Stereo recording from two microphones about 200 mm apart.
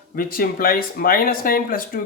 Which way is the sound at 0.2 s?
45° left (ahead or behind).